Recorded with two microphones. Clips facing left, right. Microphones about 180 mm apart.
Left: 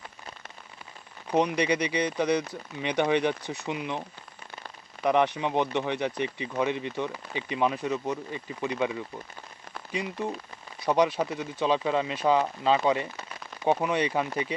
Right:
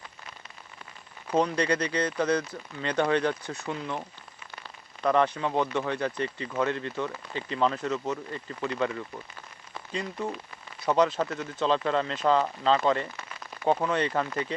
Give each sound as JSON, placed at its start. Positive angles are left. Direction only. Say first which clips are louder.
{"t": 1.3, "sound": "speech", "louder": "left 1 dB", "side_deg": 15}
{"t": 5.0, "sound": "speech", "louder": "even", "side_deg": 15}